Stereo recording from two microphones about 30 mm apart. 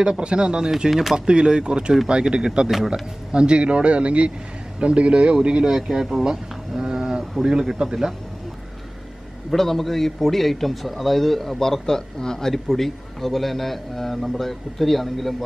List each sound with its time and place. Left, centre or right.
0.2 s speech: right
0.8 s speech: centre
1.1 s speech: right
5.8 s speech: centre
6.8 s a sound: right
7.4 s speech: right
9.5 s a man's voice: centre
11.6 s a man's voice: centre